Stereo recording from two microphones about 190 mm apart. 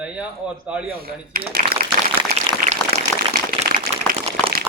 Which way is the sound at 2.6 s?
50° right (ahead or behind).